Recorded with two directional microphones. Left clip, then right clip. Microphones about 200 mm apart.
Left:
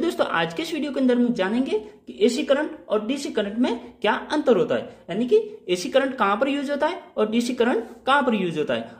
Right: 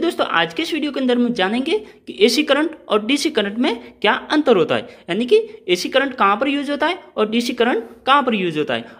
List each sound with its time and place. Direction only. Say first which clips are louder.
0.0 s a woman's voice: right 5 dB; 10° right (ahead or behind)